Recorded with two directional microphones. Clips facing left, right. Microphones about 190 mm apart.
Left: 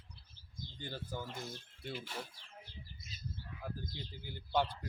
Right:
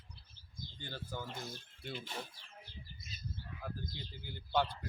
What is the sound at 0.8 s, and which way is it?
Speech, 15° left (ahead or behind).